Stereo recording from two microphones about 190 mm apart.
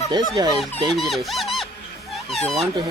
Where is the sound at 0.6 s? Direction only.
Centre (ahead or behind).